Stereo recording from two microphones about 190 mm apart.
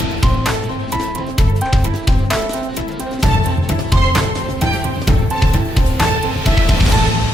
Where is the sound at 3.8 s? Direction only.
Centre (ahead or behind).